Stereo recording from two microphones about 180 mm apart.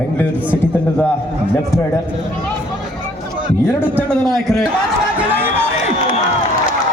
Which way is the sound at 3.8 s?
10° left (ahead or behind).